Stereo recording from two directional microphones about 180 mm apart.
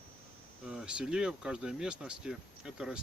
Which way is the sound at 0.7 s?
5° right (ahead or behind).